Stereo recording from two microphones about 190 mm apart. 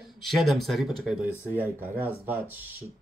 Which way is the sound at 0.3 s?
Centre (ahead or behind).